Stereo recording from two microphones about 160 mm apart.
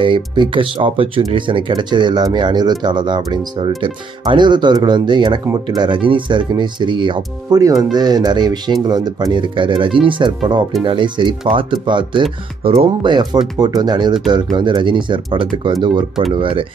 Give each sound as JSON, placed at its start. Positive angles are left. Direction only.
{"t": 0.0, "sound": "speech", "side_deg": -30}